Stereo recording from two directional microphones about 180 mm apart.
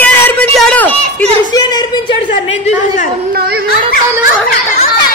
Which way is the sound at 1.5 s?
25° left (ahead or behind).